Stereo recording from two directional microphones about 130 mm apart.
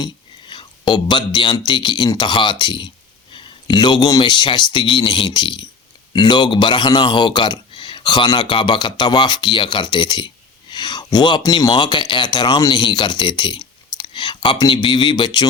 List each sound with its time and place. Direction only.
0.5 s speech: 35° left (ahead or behind)